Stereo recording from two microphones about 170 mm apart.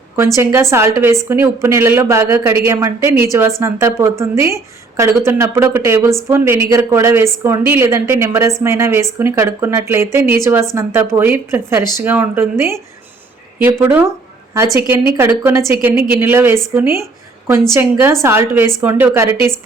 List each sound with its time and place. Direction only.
0.3 s a woman's voice: 15° right (ahead or behind)
17.0 s a sound: 15° right (ahead or behind)
17.7 s a woman's voice: 15° right (ahead or behind)